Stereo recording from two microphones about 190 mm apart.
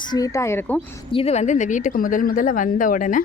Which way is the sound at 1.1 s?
35° left (ahead or behind).